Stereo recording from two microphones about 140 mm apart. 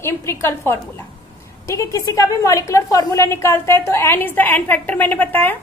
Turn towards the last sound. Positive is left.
turn(degrees=15)  # may be behind; listen again after turning